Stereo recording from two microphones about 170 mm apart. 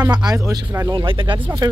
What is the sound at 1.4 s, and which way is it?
Speech, 20° right (ahead or behind).